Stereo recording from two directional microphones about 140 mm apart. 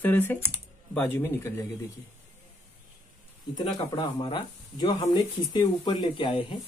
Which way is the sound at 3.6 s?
35° left (ahead or behind).